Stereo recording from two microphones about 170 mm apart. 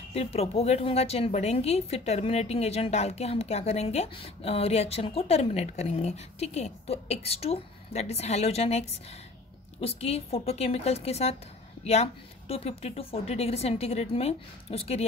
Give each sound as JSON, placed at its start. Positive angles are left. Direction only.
{"t": 0.1, "sound": "a woman's voice", "side_deg": 40}